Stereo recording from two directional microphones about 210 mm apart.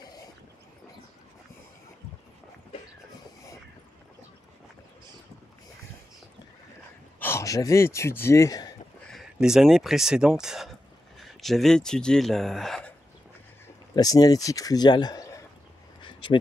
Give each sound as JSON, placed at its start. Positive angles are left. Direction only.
{"t": 7.2, "sound": "speech", "side_deg": 10}
{"t": 9.1, "sound": "speech", "side_deg": 0}
{"t": 13.9, "sound": "speech", "side_deg": 15}
{"t": 16.0, "sound": "a sound", "side_deg": 25}